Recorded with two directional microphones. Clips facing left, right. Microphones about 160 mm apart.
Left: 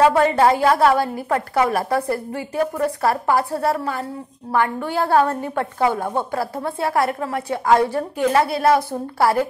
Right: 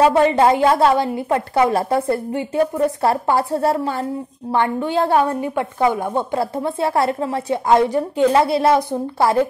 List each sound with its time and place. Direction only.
0.0 s a woman's voice: 20° right (ahead or behind)